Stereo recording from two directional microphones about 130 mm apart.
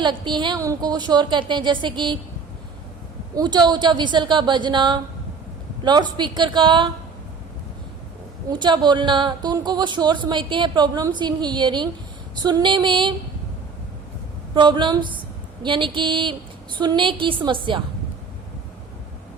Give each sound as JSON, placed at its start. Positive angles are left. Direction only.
{"t": 0.0, "sound": "speech", "side_deg": -35}
{"t": 3.3, "sound": "speech", "side_deg": -35}
{"t": 8.4, "sound": "speech", "side_deg": -35}
{"t": 14.5, "sound": "speech", "side_deg": -35}